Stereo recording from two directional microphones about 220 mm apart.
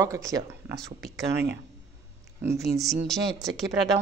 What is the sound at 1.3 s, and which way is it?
Speech, 50° right (ahead or behind).